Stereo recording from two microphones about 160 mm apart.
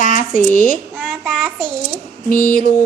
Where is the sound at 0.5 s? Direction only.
55° left (ahead or behind).